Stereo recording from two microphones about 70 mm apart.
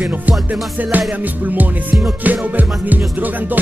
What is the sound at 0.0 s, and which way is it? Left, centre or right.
Music, right.